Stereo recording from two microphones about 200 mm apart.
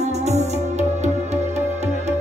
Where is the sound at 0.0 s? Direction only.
35° right (ahead or behind).